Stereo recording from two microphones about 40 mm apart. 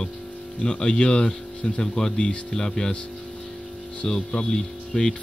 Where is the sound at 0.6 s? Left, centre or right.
Left.